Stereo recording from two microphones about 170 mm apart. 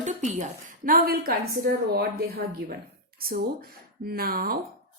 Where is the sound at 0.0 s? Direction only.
45° right (ahead or behind).